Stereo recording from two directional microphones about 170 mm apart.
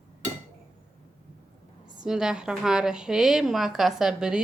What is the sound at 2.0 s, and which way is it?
A woman's voice, 5° right (ahead or behind).